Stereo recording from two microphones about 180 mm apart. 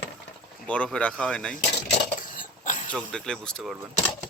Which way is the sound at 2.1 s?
50° left (ahead or behind).